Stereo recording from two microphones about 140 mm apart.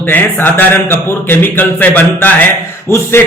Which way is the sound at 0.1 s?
15° left (ahead or behind).